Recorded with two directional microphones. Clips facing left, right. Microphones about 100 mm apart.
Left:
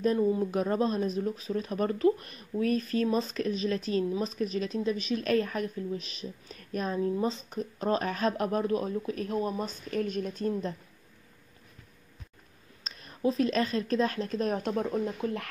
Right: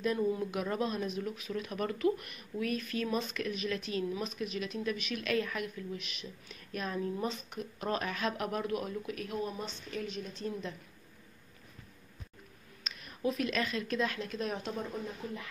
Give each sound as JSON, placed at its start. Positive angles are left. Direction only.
{"t": 0.0, "sound": "speech", "side_deg": 30}
{"t": 12.8, "sound": "speech", "side_deg": 35}
{"t": 15.2, "sound": "speech", "side_deg": 90}